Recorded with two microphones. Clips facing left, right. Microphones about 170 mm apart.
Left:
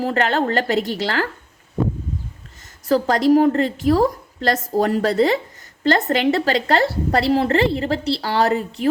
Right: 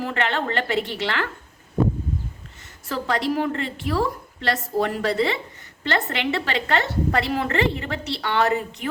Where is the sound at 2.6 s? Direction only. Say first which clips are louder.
Left 11 dB; 40° left (ahead or behind).